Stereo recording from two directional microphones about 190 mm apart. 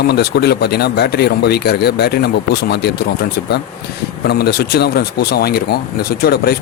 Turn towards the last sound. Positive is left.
turn(degrees=55)  # may be behind; listen again after turning